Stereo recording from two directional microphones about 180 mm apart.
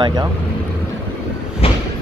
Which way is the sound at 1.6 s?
30° left (ahead or behind).